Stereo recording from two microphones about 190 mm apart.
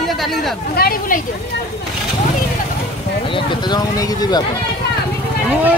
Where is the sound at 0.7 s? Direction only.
50° left (ahead or behind).